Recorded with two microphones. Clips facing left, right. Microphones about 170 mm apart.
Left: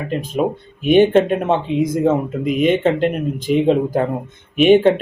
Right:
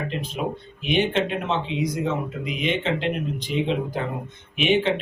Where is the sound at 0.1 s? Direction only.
45° left (ahead or behind).